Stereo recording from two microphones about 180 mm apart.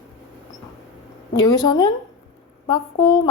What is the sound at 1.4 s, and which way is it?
A woman's voice, 20° left (ahead or behind).